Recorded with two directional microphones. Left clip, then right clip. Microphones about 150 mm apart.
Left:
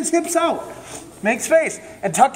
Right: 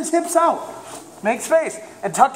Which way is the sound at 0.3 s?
10° left (ahead or behind).